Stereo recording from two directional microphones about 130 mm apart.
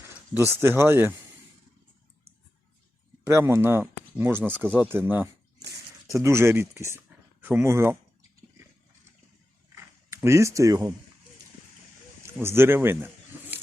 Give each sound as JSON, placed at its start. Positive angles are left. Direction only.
{"t": 0.5, "sound": "speech", "side_deg": -20}
{"t": 3.2, "sound": "speech", "side_deg": -20}
{"t": 10.2, "sound": "speech", "side_deg": -20}
{"t": 12.2, "sound": "speech", "side_deg": -20}